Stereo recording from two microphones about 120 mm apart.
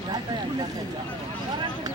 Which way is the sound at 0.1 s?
35° right (ahead or behind).